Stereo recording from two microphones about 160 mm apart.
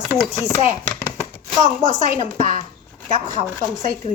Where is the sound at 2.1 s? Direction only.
40° left (ahead or behind).